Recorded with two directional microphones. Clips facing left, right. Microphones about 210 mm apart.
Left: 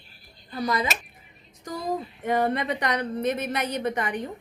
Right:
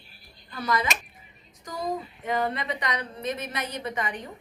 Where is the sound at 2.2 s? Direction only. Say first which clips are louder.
Left 4 dB; 50° left (ahead or behind).